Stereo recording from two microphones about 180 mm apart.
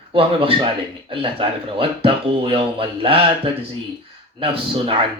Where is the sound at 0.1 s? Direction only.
30° right (ahead or behind).